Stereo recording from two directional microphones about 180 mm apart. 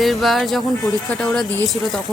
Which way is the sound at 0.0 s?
Centre (ahead or behind).